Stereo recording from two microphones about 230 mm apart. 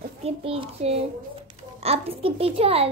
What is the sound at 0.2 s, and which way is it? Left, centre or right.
A child's voice, right.